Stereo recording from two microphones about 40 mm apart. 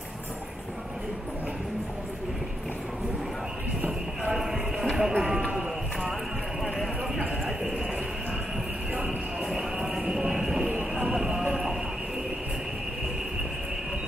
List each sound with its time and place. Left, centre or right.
4.3 s clip-clop: centre
7.4 s a sound: centre
9.4 s clip-clop: centre
9.8 s clip-clop: centre